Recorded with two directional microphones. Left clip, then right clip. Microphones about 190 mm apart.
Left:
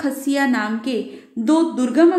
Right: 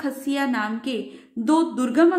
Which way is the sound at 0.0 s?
Centre (ahead or behind).